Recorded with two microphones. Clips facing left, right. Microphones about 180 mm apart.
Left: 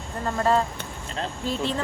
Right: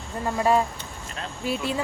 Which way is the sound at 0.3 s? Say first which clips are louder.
Right 1 dB; 10° right (ahead or behind).